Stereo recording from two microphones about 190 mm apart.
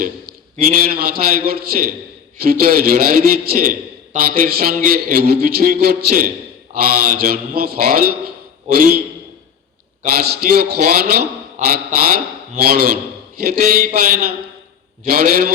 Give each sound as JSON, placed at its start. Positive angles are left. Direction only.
{"t": 0.5, "sound": "a man's voice", "side_deg": -50}
{"t": 10.2, "sound": "a man's voice", "side_deg": -55}